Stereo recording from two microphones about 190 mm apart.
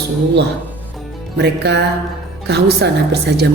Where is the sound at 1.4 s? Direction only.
60° right (ahead or behind).